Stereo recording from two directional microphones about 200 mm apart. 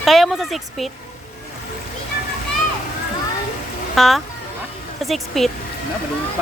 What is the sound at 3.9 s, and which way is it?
Speech, centre (ahead or behind).